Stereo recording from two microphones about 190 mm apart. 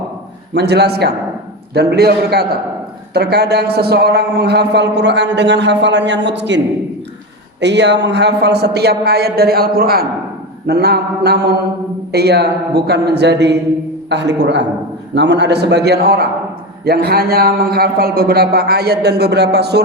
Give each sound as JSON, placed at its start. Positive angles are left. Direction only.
{"t": 0.5, "sound": "a man's voice", "side_deg": -60}
{"t": 7.6, "sound": "a man's voice", "side_deg": -65}